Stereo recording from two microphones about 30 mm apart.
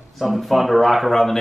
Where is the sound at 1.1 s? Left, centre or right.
Centre.